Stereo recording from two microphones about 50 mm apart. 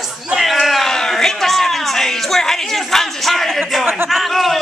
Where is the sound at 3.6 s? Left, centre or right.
Centre.